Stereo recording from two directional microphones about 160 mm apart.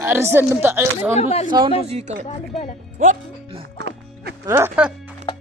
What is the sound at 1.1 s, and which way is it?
Speech, 40° left (ahead or behind).